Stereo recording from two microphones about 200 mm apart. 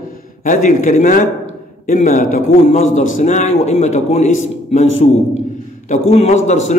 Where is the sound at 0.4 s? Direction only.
40° left (ahead or behind).